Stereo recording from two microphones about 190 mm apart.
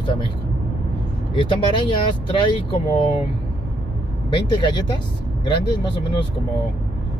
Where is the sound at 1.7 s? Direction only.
25° left (ahead or behind).